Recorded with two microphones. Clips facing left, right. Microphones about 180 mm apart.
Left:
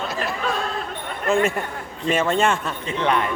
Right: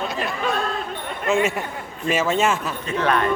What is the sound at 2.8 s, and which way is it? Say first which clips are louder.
Speech: right 1 dB; 15° left (ahead or behind).